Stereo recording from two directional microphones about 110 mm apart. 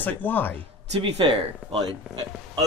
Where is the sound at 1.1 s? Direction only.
55° right (ahead or behind).